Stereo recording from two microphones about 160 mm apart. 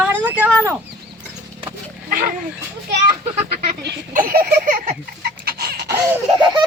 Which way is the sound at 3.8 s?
60° right (ahead or behind).